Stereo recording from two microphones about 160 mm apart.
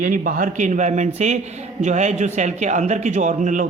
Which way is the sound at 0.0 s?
60° right (ahead or behind).